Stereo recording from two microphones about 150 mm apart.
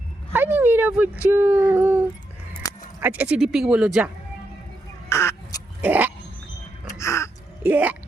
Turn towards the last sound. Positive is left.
turn(degrees=-10)  # may be behind; listen again after turning